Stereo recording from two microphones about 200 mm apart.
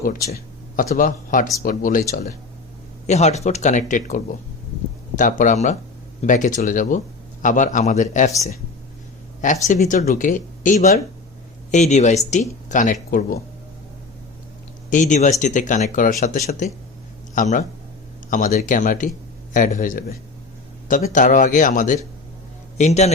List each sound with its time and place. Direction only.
0.8 s speech: 40° left (ahead or behind)
3.1 s speech: 35° left (ahead or behind)
9.6 s speech: 35° left (ahead or behind)
14.8 s speech: 40° left (ahead or behind)